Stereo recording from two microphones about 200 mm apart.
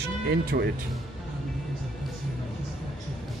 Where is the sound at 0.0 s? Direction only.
55° right (ahead or behind).